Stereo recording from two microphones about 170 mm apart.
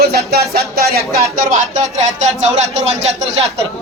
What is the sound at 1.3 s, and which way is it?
A man's voice, 50° right (ahead or behind).